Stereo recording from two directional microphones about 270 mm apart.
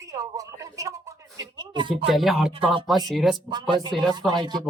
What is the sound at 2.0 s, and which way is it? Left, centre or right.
Speech, centre.